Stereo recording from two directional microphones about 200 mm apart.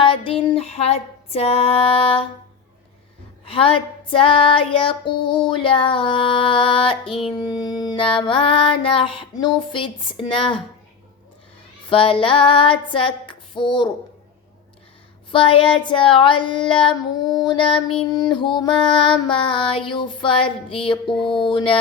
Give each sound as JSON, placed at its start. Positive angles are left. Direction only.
{"t": 0.0, "sound": "female singing", "side_deg": 25}
{"t": 3.4, "sound": "female singing", "side_deg": 25}
{"t": 11.9, "sound": "female singing", "side_deg": 25}
{"t": 15.3, "sound": "female singing", "side_deg": 25}
{"t": 17.7, "sound": "child singing", "side_deg": 5}
{"t": 18.1, "sound": "female singing", "side_deg": 20}